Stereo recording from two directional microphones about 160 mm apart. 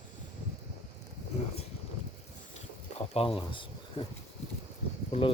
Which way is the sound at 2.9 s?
40° left (ahead or behind).